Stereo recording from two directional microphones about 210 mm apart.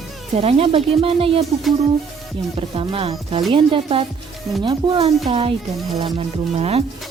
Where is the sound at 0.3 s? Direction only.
25° right (ahead or behind).